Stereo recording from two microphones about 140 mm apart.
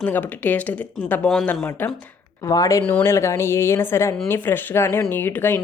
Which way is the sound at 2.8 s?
15° left (ahead or behind).